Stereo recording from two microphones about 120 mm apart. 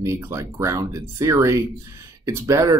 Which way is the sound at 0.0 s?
25° right (ahead or behind).